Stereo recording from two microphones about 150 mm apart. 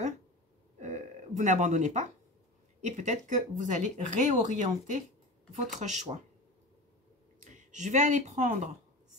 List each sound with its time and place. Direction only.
0.7 s burping: 55° right (ahead or behind)
2.8 s speech: 55° right (ahead or behind)
7.5 s speech: 55° right (ahead or behind)